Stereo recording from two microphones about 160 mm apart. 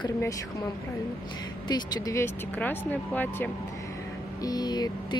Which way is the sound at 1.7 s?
25° left (ahead or behind).